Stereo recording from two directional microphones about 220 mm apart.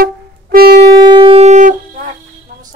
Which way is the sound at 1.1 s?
20° right (ahead or behind).